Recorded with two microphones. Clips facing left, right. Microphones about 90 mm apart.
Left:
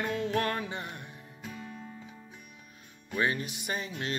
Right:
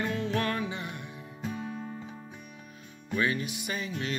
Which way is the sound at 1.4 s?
30° right (ahead or behind).